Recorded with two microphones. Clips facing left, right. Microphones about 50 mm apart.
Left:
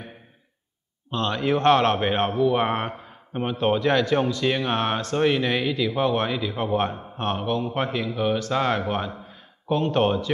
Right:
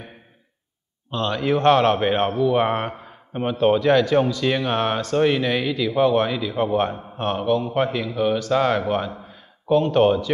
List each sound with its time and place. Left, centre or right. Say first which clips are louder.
1.1 s a man's voice: right 2 dB; centre